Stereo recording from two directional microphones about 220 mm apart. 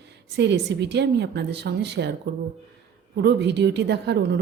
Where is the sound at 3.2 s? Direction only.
50° right (ahead or behind).